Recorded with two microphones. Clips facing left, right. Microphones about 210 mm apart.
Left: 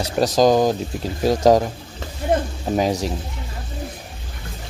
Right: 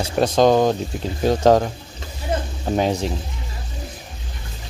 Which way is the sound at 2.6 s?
5° left (ahead or behind).